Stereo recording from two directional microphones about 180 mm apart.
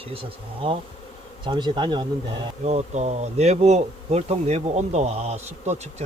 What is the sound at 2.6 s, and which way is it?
Insect, 35° right (ahead or behind).